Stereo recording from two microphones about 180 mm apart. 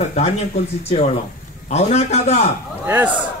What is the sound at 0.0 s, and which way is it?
A man's voice, 40° left (ahead or behind).